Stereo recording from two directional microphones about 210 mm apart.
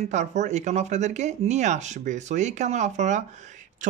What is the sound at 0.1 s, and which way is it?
Speech, 35° right (ahead or behind).